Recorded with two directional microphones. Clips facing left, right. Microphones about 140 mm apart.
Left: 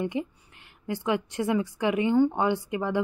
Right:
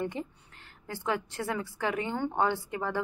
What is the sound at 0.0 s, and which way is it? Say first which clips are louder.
A woman's voice: left 5 dB; 15° left (ahead or behind).